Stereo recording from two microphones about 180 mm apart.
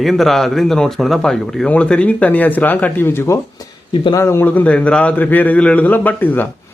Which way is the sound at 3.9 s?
25° left (ahead or behind).